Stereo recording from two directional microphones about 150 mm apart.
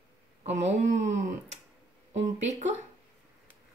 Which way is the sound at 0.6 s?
55° right (ahead or behind).